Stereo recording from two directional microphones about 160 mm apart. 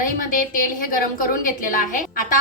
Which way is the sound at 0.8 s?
60° left (ahead or behind).